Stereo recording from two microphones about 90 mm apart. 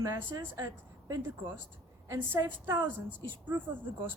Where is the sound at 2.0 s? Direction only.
30° right (ahead or behind).